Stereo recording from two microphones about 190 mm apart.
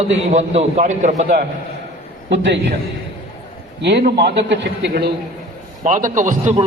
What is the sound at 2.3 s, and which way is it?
Speech, 70° right (ahead or behind).